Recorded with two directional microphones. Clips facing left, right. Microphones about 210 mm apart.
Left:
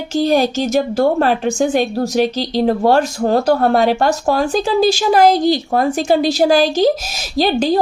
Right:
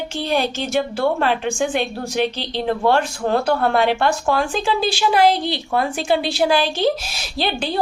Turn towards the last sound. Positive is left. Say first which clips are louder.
# left 8 dB
turn(degrees=40)  # may be behind; listen again after turning